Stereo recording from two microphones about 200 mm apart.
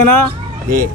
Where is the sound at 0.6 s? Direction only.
45° right (ahead or behind).